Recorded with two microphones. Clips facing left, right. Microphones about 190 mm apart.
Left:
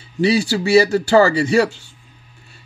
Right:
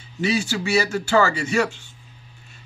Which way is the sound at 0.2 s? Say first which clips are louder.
Left 6 dB; 35° left (ahead or behind).